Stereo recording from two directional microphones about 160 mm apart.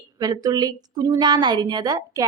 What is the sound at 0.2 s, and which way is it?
A woman's voice, 25° right (ahead or behind).